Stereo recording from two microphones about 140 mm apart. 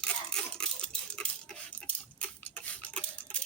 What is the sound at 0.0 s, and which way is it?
Cutlery, 5° left (ahead or behind).